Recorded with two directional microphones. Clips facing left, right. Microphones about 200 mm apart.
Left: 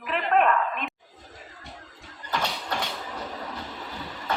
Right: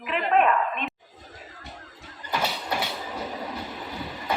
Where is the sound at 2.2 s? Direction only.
5° right (ahead or behind).